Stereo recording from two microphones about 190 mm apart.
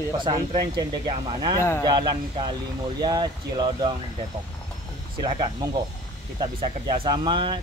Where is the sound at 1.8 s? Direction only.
25° right (ahead or behind).